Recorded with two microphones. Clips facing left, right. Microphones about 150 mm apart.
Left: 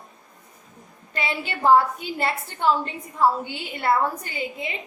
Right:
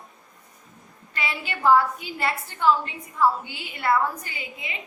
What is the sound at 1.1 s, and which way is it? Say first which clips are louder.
A woman's voice: left 3 dB; 25° left (ahead or behind).